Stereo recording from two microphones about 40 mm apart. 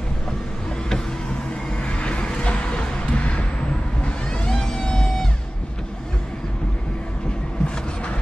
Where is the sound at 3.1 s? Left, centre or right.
Left.